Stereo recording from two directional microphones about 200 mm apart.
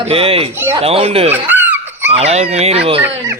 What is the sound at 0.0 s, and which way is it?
Speech, 30° right (ahead or behind).